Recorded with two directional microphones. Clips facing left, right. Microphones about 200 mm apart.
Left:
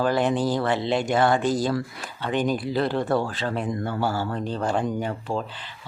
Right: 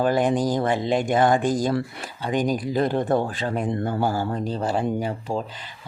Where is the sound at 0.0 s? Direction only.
15° right (ahead or behind).